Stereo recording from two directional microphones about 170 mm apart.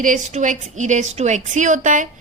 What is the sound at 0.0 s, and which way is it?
A woman's voice, 45° right (ahead or behind).